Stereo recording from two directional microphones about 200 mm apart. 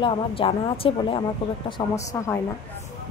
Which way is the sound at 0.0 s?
25° left (ahead or behind).